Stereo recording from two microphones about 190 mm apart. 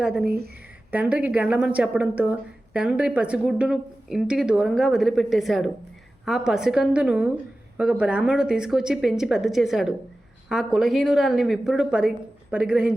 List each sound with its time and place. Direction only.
0.0 s speech: 5° right (ahead or behind)
0.3 s speech: 55° right (ahead or behind)
0.9 s speech: 5° right (ahead or behind)